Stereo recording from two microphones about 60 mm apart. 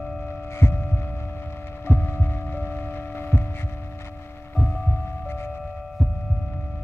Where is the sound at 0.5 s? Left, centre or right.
Left.